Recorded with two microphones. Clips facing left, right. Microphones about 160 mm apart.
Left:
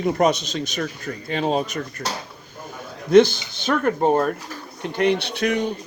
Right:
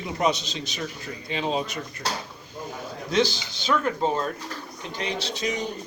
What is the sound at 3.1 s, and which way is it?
Speech, 55° left (ahead or behind).